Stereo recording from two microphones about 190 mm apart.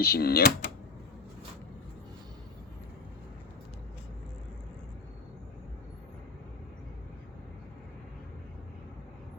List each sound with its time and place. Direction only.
0.0 s speech: 55° left (ahead or behind)